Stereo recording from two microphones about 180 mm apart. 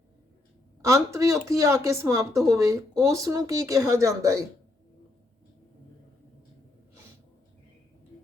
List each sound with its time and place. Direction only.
0.9 s speech: 15° right (ahead or behind)